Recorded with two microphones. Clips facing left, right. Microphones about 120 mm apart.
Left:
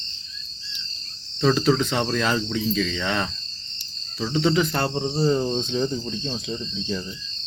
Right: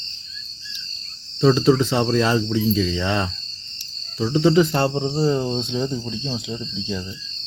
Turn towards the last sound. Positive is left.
turn(degrees=-15)  # may be behind; listen again after turning